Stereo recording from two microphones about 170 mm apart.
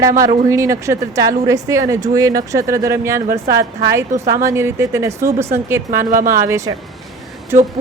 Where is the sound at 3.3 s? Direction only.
60° right (ahead or behind).